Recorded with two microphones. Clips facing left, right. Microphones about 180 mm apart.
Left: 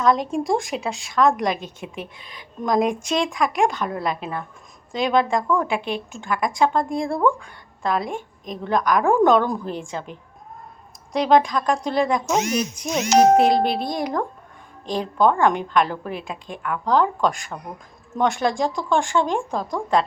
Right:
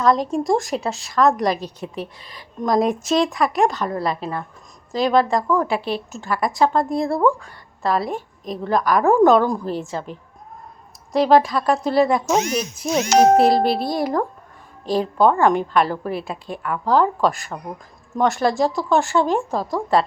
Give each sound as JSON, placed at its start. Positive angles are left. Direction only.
{"t": 0.0, "sound": "a woman's voice", "side_deg": 0}
{"t": 1.6, "sound": "a woman's voice", "side_deg": -40}
{"t": 2.8, "sound": "a woman's voice", "side_deg": 0}
{"t": 11.1, "sound": "a woman's voice", "side_deg": -5}